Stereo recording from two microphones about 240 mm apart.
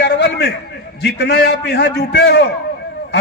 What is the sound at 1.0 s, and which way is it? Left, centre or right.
A man's voice, left.